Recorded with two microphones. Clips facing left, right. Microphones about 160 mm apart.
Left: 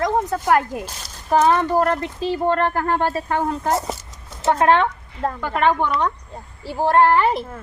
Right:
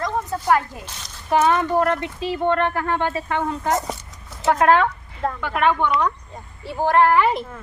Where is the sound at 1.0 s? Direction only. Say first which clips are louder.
Left 1 dB; 35° left (ahead or behind).